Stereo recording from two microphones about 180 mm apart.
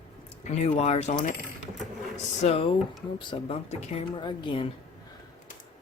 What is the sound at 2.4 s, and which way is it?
Speech, 35° left (ahead or behind).